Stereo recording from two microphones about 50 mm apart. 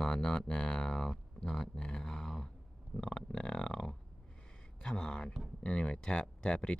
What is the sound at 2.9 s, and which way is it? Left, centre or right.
Speech, left.